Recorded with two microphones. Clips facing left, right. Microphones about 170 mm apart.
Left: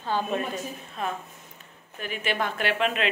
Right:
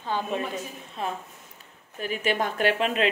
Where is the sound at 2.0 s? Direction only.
40° right (ahead or behind).